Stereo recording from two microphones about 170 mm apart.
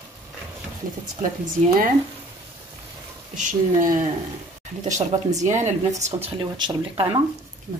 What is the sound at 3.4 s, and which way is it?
Speech, 50° right (ahead or behind).